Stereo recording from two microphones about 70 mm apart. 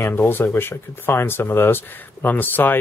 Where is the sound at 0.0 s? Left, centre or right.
Left.